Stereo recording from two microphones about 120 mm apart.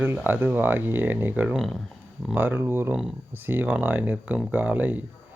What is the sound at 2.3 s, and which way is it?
Speech, 15° right (ahead or behind).